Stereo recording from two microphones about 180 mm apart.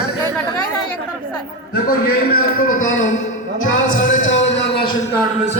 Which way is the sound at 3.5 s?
90° left.